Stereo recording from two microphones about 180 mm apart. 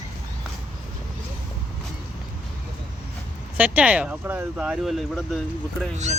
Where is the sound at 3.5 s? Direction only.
5° right (ahead or behind).